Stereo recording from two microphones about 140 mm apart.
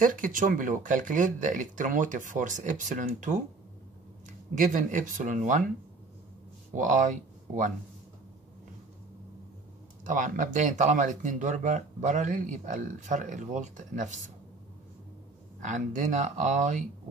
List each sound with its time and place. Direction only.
0.0 s speech: 70° right (ahead or behind)
4.6 s speech: 65° right (ahead or behind)
6.7 s speech: 65° right (ahead or behind)
10.0 s speech: 65° right (ahead or behind)
15.6 s speech: 65° right (ahead or behind)